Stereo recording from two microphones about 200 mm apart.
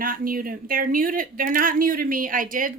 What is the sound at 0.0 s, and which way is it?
Speech, 45° right (ahead or behind).